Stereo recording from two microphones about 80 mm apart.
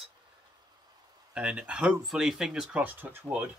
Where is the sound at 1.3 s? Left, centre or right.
Centre.